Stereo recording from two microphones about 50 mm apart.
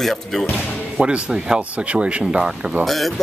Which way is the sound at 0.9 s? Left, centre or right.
Centre.